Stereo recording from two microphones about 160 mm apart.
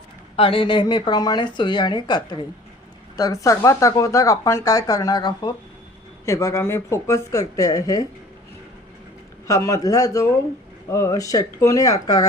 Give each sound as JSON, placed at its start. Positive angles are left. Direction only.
{"t": 0.3, "sound": "speech", "side_deg": 35}
{"t": 3.4, "sound": "speech", "side_deg": 20}
{"t": 9.5, "sound": "speech", "side_deg": 20}